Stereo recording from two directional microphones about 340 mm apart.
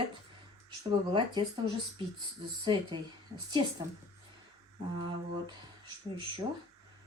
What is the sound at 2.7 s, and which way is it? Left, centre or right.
Speech, centre.